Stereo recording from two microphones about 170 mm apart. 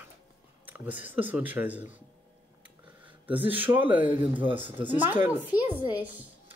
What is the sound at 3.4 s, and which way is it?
Speech, 10° right (ahead or behind).